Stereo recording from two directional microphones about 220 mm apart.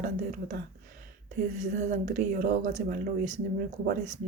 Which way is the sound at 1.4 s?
35° right (ahead or behind).